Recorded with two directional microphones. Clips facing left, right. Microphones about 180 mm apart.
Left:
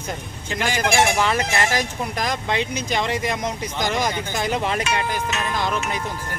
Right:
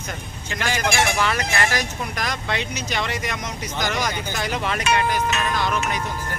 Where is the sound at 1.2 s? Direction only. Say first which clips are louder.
Left 2 dB; 25° left (ahead or behind).